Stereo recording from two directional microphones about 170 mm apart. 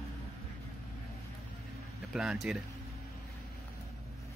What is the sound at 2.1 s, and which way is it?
Speech, 5° right (ahead or behind).